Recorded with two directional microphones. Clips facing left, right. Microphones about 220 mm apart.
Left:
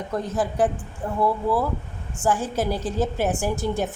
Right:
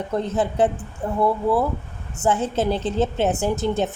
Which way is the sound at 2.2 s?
25° right (ahead or behind).